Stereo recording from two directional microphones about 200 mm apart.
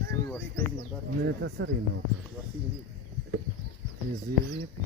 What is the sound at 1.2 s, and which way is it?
Speech, 65° right (ahead or behind).